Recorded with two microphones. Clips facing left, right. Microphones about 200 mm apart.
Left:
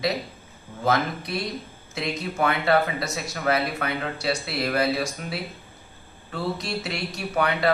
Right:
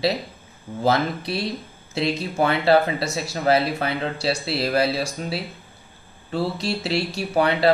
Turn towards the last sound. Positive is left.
turn(degrees=-30)  # may be behind; listen again after turning